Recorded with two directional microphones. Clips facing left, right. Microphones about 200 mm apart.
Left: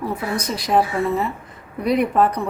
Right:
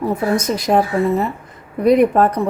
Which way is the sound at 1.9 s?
50° right (ahead or behind).